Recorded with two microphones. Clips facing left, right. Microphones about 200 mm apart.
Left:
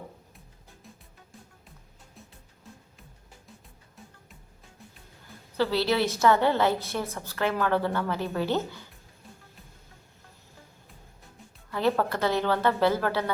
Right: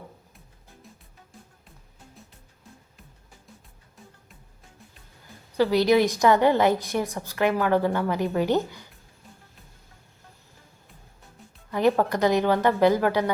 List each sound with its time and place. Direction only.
0.9 s music: centre (ahead or behind)
2.2 s music: centre (ahead or behind)
5.5 s a woman's voice: 15° right (ahead or behind)
11.7 s a woman's voice: 15° right (ahead or behind)